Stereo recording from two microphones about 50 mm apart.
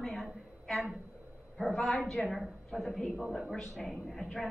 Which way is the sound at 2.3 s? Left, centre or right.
Centre.